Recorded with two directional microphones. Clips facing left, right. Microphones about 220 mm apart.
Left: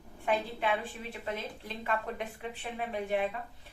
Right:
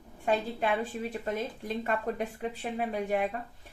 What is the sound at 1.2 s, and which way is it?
A woman's voice, 40° right (ahead or behind).